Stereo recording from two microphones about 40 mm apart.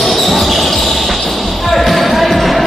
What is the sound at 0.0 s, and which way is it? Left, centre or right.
Basketball bounce, centre.